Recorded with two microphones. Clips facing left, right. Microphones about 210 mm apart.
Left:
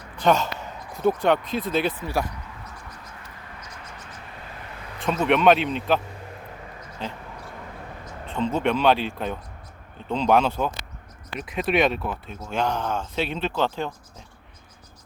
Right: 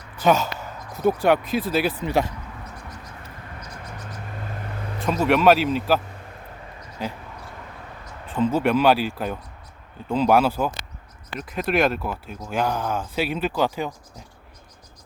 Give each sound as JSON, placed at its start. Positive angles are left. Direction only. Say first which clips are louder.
{"t": 0.2, "sound": "speech", "louder": "right 1 dB", "side_deg": -5}
{"t": 2.0, "sound": "speech", "louder": "right 4 dB", "side_deg": -20}
{"t": 5.0, "sound": "speech", "louder": "right 1 dB", "side_deg": 0}
{"t": 7.0, "sound": "speech", "louder": "right 3 dB", "side_deg": -10}
{"t": 8.4, "sound": "speech", "louder": "right 3 dB", "side_deg": -5}